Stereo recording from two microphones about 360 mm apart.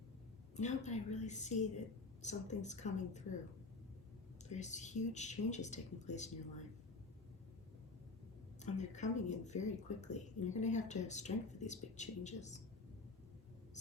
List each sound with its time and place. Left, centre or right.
0.5 s speech: centre
4.4 s speech: centre
8.6 s speech: centre